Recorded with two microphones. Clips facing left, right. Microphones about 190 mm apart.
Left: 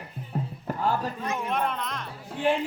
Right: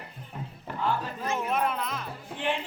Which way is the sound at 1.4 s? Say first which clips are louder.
Right 1 dB; 5° right (ahead or behind).